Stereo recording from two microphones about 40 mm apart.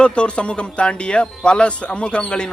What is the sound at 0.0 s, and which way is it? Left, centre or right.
Speech, left.